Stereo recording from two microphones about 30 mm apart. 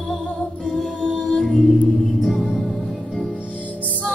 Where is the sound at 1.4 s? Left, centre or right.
Centre.